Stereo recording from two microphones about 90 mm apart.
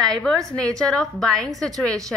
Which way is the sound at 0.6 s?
10° left (ahead or behind).